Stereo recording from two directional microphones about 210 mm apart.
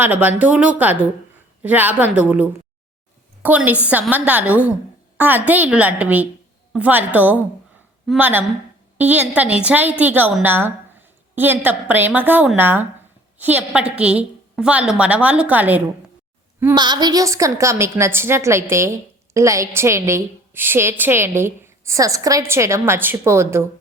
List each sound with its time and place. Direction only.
0.0 s a woman's voice: 10° right (ahead or behind)
16.7 s a woman's voice: 20° right (ahead or behind)